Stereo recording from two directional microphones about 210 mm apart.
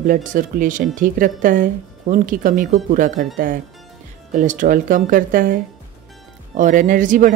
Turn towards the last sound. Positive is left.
turn(degrees=-40)  # may be behind; listen again after turning